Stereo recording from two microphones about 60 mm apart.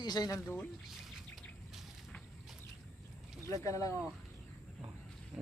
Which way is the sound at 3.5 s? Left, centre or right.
Left.